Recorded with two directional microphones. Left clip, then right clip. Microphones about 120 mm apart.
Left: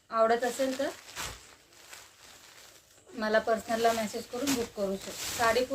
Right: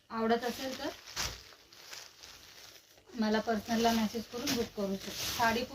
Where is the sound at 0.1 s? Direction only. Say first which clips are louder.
Left 7 dB; 40° left (ahead or behind).